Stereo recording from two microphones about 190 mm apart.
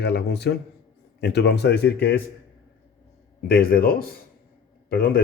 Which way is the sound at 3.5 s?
50° left (ahead or behind).